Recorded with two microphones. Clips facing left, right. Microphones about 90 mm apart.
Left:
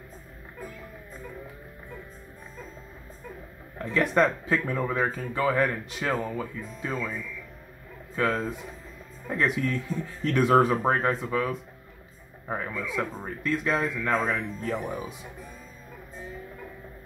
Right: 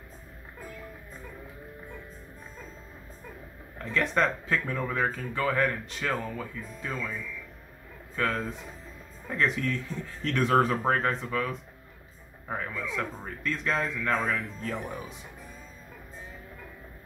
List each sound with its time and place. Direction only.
3.7 s speech: 10° left (ahead or behind)
8.2 s speech: 15° left (ahead or behind)
14.2 s speech: 20° left (ahead or behind)
14.7 s speech: 5° left (ahead or behind)